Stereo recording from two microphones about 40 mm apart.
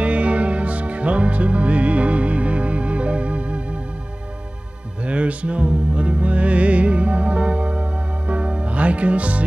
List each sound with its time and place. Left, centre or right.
0.0 s music: right
5.0 s music: right